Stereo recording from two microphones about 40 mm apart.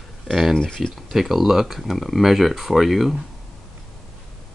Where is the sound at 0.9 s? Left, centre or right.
Centre.